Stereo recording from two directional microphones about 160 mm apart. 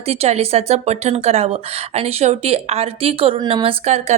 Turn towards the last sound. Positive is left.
turn(degrees=-45)  # may be behind; listen again after turning